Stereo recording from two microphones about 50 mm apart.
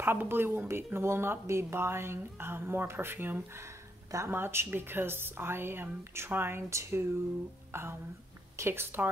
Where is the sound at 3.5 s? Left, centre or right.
Right.